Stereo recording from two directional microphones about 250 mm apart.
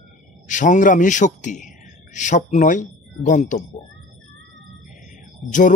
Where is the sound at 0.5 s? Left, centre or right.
Left.